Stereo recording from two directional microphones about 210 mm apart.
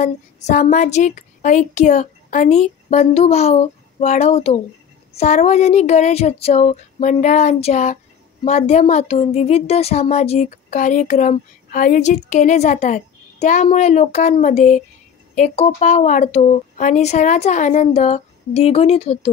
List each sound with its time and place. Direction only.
0.0 s speech: 35° left (ahead or behind)